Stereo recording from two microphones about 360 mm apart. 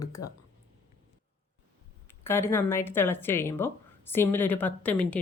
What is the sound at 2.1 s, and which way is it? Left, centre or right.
Speech, centre.